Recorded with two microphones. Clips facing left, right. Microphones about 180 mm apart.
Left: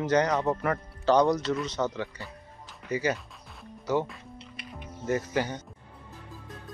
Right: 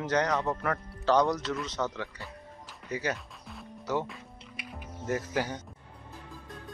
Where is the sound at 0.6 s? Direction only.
Centre (ahead or behind).